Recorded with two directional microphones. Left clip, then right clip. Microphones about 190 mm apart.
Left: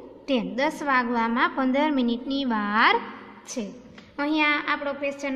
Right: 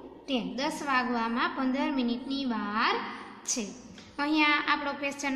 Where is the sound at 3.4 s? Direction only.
25° left (ahead or behind).